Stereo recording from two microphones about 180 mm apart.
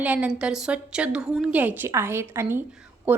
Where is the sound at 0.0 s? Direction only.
10° right (ahead or behind).